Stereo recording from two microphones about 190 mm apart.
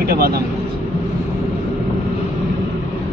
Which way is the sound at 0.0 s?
50° right (ahead or behind).